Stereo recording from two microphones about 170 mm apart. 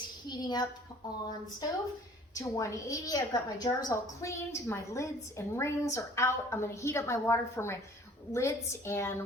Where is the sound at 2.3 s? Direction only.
20° left (ahead or behind).